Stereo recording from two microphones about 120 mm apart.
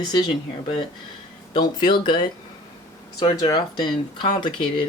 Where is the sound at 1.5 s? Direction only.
40° left (ahead or behind).